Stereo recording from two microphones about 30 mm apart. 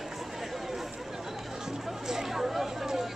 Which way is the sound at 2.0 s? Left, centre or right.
Centre.